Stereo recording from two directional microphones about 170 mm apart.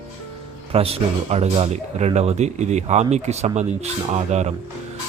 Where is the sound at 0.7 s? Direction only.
35° right (ahead or behind).